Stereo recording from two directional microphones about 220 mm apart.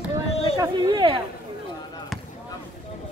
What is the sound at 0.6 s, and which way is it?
Speech, 20° right (ahead or behind).